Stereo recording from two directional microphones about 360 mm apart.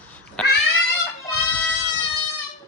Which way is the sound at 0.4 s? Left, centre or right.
Centre.